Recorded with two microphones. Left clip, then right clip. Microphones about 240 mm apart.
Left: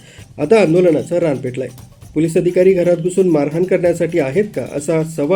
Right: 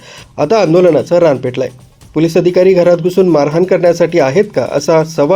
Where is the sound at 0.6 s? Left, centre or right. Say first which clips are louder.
Right 4 dB; centre.